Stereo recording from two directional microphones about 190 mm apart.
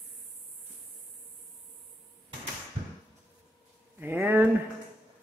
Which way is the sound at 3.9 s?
10° right (ahead or behind).